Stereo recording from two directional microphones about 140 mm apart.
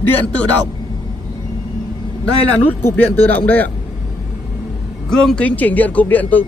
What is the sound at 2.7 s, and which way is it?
Speech, 10° left (ahead or behind).